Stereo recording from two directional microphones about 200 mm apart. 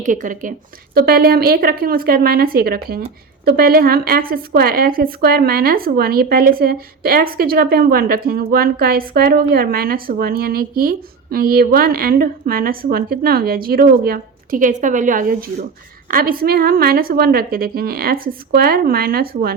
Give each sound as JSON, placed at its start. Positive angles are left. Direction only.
{"t": 0.0, "sound": "a woman's voice", "side_deg": -40}